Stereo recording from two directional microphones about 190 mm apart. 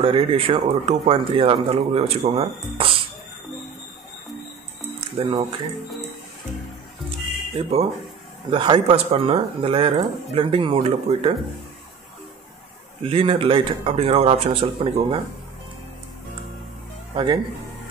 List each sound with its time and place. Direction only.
0.0 s speech: 30° right (ahead or behind)
5.2 s speech: 30° right (ahead or behind)
7.5 s speech: 30° right (ahead or behind)
13.0 s speech: 30° right (ahead or behind)
17.1 s speech: 25° right (ahead or behind)